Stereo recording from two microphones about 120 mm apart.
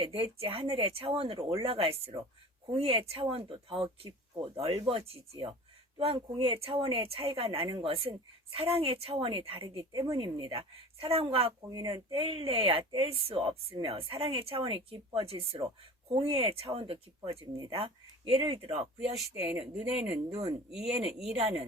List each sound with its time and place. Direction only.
0.0 s speech: 50° right (ahead or behind)
6.1 s speech: 45° right (ahead or behind)
10.2 s speech: 40° right (ahead or behind)
10.5 s speech: 50° right (ahead or behind)
11.7 s speech: 35° right (ahead or behind); by 18.9 s 50° right (ahead or behind)
19.5 s speech: 10° right (ahead or behind)
20.3 s speech: 30° right (ahead or behind)
20.7 s speech: 5° right (ahead or behind)